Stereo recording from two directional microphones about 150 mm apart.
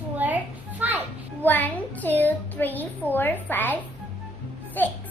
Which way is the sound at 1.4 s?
10° left (ahead or behind).